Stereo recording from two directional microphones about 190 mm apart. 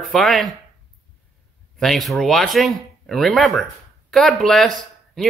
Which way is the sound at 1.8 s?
Centre (ahead or behind).